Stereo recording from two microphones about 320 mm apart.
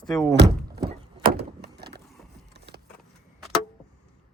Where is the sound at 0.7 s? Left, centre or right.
Right.